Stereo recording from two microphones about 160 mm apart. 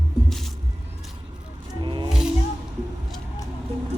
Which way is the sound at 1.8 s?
30° right (ahead or behind).